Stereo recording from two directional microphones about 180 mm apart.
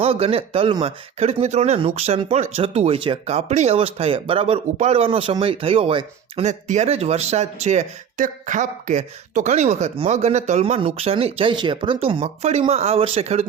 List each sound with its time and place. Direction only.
0.0 s speech: 35° right (ahead or behind)
6.4 s speech: 40° right (ahead or behind)